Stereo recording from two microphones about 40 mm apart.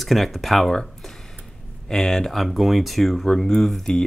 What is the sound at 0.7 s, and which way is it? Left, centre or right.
Speech, centre.